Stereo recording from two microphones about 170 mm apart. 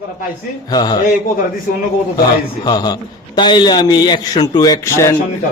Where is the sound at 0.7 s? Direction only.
25° left (ahead or behind).